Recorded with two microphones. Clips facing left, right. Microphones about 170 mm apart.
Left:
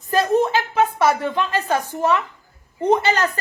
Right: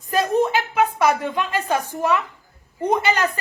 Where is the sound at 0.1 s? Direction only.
30° left (ahead or behind).